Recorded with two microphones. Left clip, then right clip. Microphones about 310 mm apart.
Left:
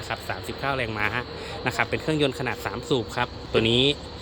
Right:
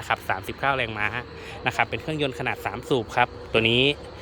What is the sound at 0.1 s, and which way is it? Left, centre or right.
Speech, centre.